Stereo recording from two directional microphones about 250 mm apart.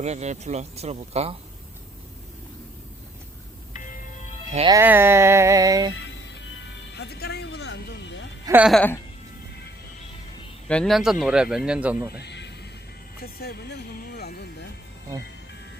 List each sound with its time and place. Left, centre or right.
0.0 s speech: right
3.7 s music: left
4.5 s speech: centre
4.8 s music: centre
6.1 s music: left
8.4 s speech: centre
10.7 s speech: centre
12.1 s a sound: left
13.2 s speech: left